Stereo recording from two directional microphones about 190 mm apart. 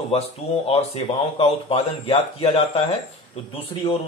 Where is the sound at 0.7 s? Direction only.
30° left (ahead or behind).